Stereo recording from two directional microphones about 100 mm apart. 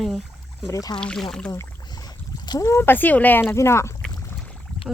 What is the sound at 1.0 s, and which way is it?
Speech, 5° left (ahead or behind).